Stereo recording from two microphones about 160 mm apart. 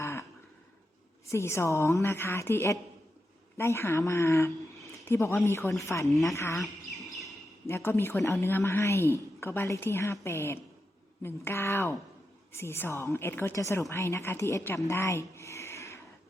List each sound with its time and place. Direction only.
0.0 s a sound: 15° left (ahead or behind)
1.3 s a woman's voice: 15° left (ahead or behind)
6.6 s bird: centre (ahead or behind)
7.7 s a woman's voice: 15° left (ahead or behind)